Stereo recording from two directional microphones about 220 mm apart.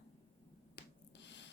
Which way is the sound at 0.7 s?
55° left (ahead or behind).